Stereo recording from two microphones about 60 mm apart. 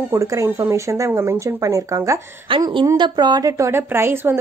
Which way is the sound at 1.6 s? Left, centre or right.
Right.